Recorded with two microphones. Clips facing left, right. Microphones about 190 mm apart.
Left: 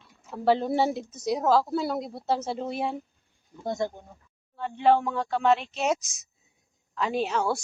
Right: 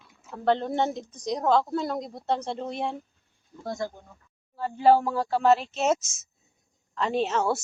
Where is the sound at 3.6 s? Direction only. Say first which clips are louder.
Left 3 dB; 20° left (ahead or behind).